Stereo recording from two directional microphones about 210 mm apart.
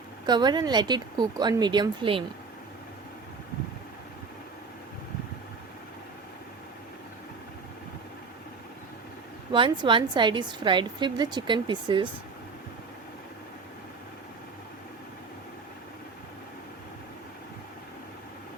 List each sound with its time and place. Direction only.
0.3 s a woman's voice: 20° right (ahead or behind)
9.5 s a woman's voice: 20° right (ahead or behind)